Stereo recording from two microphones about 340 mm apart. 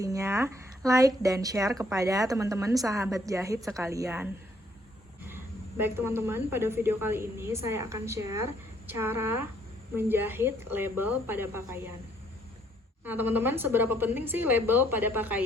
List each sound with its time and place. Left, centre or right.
0.0 s speech: centre
5.3 s speech: centre
13.1 s a woman's voice: centre